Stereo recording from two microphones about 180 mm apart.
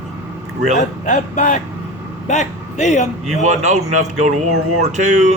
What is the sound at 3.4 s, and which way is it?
Speech, 40° right (ahead or behind).